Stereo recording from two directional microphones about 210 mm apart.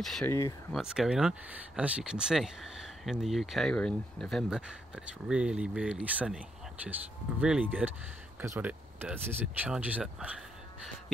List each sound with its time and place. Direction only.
0.0 s speech: centre (ahead or behind)
0.3 s speech: 20° left (ahead or behind)
0.7 s speech: centre (ahead or behind)